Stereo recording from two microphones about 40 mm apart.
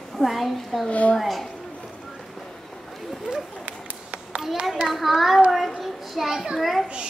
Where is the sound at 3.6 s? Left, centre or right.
Right.